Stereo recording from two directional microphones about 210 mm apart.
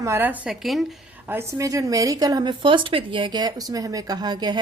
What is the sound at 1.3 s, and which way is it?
A woman's voice, 15° right (ahead or behind).